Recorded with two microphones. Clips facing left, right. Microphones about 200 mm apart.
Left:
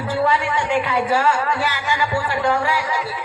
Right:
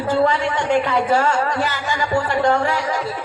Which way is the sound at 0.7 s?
45° right (ahead or behind).